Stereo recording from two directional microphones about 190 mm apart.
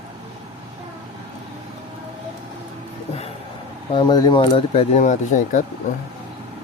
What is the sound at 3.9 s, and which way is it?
Speech, 20° left (ahead or behind).